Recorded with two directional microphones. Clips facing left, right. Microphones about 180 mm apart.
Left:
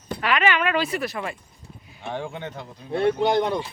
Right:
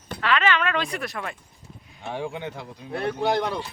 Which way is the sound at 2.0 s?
10° right (ahead or behind).